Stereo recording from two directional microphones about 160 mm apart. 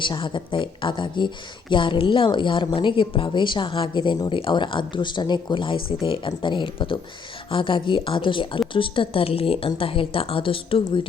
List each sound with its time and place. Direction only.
0.0 s a woman's voice: 30° left (ahead or behind)